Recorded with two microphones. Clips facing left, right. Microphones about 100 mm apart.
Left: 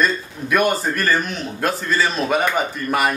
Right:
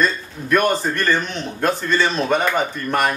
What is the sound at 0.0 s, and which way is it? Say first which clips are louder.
Speech: even; 5° left (ahead or behind).